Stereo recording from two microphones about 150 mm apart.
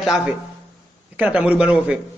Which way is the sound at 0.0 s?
5° right (ahead or behind).